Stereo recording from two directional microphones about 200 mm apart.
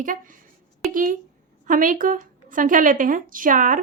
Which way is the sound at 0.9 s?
40° right (ahead or behind).